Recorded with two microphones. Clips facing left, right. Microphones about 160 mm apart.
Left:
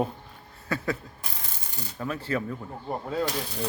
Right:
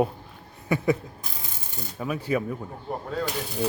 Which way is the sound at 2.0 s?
10° right (ahead or behind).